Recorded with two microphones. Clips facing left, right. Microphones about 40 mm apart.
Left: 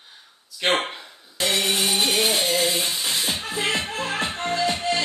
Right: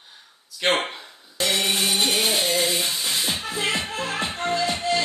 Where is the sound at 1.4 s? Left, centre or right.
Centre.